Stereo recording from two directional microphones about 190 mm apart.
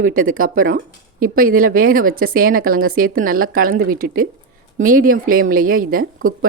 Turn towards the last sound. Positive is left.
turn(degrees=-50)  # may be behind; listen again after turning